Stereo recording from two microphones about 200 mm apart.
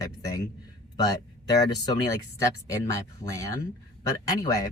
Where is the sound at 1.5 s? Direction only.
20° left (ahead or behind).